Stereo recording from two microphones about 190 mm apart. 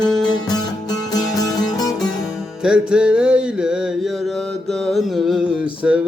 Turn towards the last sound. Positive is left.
turn(degrees=-5)  # may be behind; listen again after turning